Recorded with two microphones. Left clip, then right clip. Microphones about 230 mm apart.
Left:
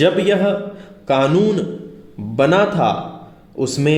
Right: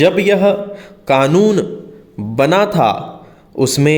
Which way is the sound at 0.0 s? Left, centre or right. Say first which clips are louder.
Right 4 dB; right.